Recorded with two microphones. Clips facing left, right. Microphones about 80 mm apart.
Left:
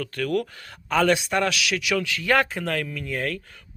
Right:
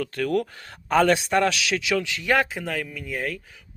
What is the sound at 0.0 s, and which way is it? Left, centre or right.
A man's voice, right.